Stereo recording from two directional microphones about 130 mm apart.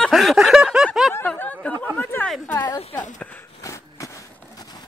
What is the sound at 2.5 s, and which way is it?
Speech, 30° left (ahead or behind).